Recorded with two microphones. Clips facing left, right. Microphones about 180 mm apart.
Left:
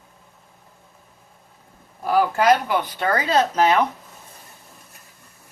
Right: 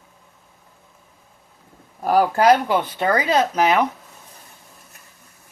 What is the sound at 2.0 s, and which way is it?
Speech, 40° right (ahead or behind).